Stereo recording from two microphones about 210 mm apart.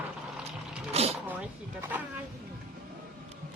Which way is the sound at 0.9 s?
30° right (ahead or behind).